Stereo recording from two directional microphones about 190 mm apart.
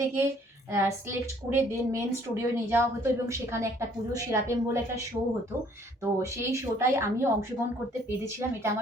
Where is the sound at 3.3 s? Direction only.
15° right (ahead or behind).